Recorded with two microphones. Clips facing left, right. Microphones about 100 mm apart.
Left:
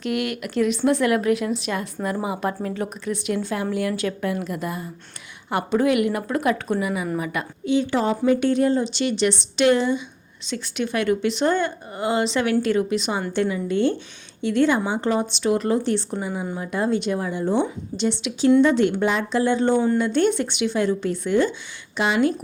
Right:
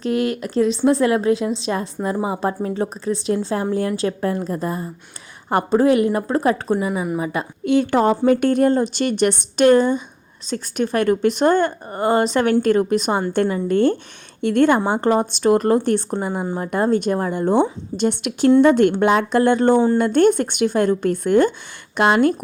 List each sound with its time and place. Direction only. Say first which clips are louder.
0.0 s a woman's voice: right 5 dB; 35° right (ahead or behind)
7.6 s a woman's voice: right 5 dB; 55° right (ahead or behind)